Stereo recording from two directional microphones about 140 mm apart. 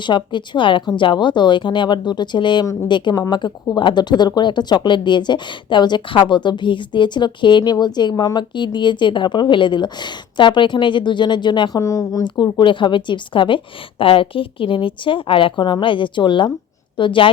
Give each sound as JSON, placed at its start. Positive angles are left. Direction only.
{"t": 0.0, "sound": "a woman's voice", "side_deg": 35}